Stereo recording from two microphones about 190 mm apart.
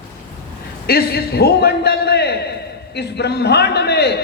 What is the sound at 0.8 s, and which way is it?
A man's voice, 55° left (ahead or behind).